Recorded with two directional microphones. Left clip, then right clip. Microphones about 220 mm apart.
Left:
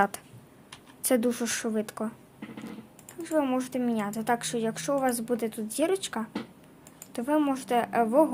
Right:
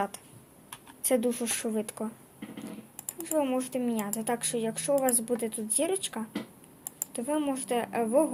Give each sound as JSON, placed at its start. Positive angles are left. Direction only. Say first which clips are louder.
{"t": 1.2, "sound": "speech", "louder": "left 2 dB", "side_deg": 30}
{"t": 3.2, "sound": "speech", "louder": "left 1 dB", "side_deg": 25}